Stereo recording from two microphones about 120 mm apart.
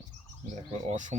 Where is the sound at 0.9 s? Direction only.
90° right.